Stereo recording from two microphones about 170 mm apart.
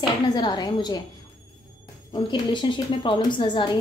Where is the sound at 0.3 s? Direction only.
25° left (ahead or behind).